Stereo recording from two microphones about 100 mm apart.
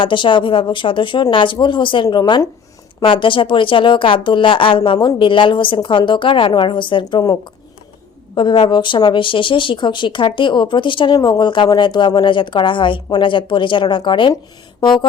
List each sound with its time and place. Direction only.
0.0 s speech: 55° left (ahead or behind)
3.0 s speech: 60° left (ahead or behind)
7.1 s speech: 40° left (ahead or behind)
8.4 s speech: 50° left (ahead or behind)